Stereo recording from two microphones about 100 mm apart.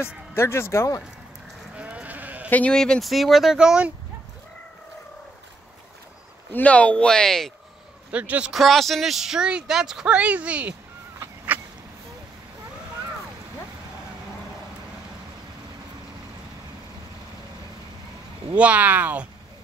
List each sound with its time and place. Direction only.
0.3 s speech: 25° left (ahead or behind)
1.8 s sheep: 10° right (ahead or behind)
2.5 s speech: 10° left (ahead or behind); by 3.9 s 10° right (ahead or behind)
6.5 s speech: 15° left (ahead or behind)
8.1 s speech: 15° right (ahead or behind)
8.5 s speech: centre (ahead or behind)
11.1 s a sound: 15° right (ahead or behind)
18.5 s speech: 15° right (ahead or behind)